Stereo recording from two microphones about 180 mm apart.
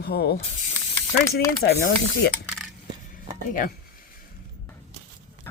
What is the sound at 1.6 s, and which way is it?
Speech, 65° left (ahead or behind).